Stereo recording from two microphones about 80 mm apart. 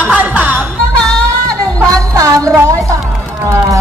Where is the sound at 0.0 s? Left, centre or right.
Centre.